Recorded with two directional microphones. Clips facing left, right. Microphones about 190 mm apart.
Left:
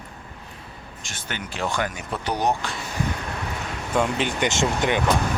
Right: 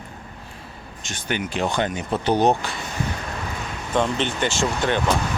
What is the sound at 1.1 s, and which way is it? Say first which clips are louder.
Speech: right 8 dB; 15° right (ahead or behind).